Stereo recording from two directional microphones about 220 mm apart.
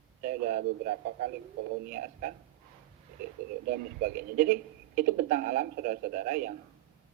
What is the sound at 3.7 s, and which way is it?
Speech, 45° right (ahead or behind).